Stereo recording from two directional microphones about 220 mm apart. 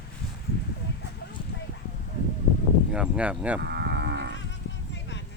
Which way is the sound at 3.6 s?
50° right (ahead or behind).